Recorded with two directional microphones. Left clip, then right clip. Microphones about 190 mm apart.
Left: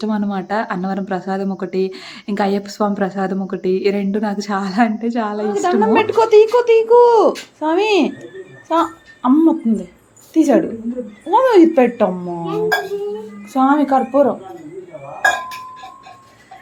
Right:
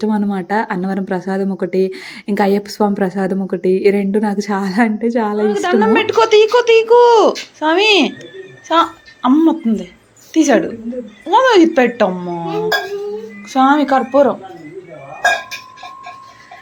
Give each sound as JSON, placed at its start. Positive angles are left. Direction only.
{"t": 0.0, "sound": "speech", "side_deg": -15}
{"t": 5.5, "sound": "a woman's voice", "side_deg": 0}